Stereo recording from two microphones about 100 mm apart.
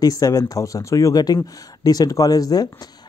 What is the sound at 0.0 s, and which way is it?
Speech, 40° left (ahead or behind).